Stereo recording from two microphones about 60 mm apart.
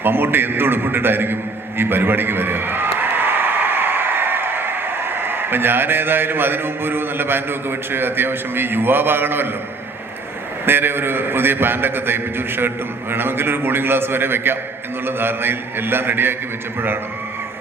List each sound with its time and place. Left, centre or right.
0.0 s a man's voice: right
1.8 s a sound: right
5.2 s a man's voice: right
10.7 s a man's voice: right